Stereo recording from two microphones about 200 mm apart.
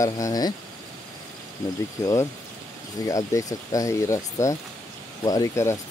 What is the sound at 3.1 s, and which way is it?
Speech, 15° left (ahead or behind).